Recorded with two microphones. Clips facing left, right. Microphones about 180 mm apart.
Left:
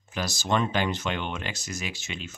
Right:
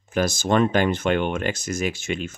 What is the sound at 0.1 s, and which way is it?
Speech, 50° right (ahead or behind).